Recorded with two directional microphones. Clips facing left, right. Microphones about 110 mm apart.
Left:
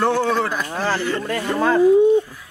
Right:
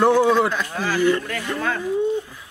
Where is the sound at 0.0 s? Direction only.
15° right (ahead or behind).